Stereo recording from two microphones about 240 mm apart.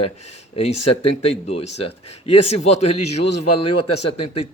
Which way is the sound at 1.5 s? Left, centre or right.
Left.